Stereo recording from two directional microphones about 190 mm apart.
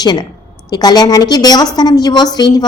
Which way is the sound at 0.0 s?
20° left (ahead or behind).